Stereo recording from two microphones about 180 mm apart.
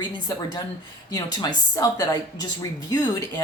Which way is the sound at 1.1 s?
20° left (ahead or behind).